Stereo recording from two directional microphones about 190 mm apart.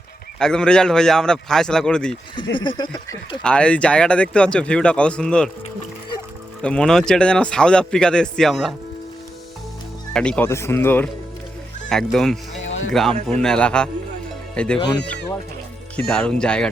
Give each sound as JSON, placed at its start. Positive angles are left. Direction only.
{"t": 0.3, "sound": "speech", "side_deg": 5}
{"t": 2.3, "sound": "speech", "side_deg": 25}
{"t": 3.4, "sound": "speech", "side_deg": 5}
{"t": 6.6, "sound": "speech", "side_deg": 5}
{"t": 10.1, "sound": "speech", "side_deg": 5}
{"t": 12.6, "sound": "music", "side_deg": 90}
{"t": 12.9, "sound": "speech", "side_deg": 0}
{"t": 16.0, "sound": "speech", "side_deg": 5}